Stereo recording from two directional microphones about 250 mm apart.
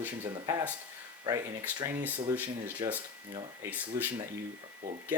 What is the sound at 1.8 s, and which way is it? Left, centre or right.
Speech, centre.